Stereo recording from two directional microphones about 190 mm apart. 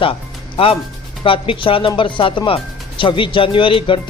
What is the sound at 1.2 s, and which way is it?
Speech, 25° left (ahead or behind).